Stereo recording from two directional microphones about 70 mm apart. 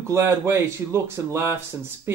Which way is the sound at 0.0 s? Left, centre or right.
Right.